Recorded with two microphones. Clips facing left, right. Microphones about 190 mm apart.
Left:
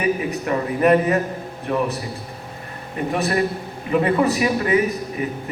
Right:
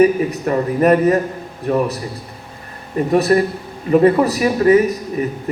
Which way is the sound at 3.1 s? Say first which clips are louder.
Right 7 dB; 40° right (ahead or behind).